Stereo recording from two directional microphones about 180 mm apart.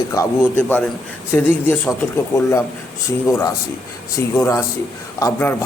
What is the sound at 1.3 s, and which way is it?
Speech, 10° left (ahead or behind).